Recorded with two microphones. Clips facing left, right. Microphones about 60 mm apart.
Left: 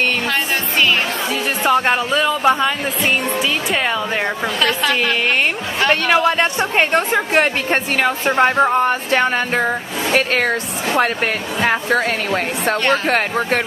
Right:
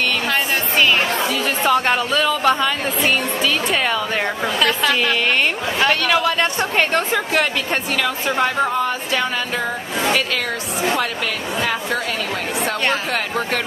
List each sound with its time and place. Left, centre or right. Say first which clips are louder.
1.6 s speech: left 2 dB; centre
4.6 s a woman's voice: even; centre
6.0 s speech: left 3 dB; left
7.3 s speech: left 5 dB; left
11.6 s speech: left 6 dB; left